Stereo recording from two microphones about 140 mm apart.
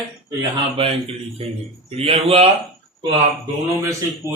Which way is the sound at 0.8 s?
40° right (ahead or behind).